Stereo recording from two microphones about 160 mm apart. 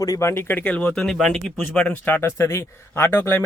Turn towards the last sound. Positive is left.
turn(degrees=10)  # may be behind; listen again after turning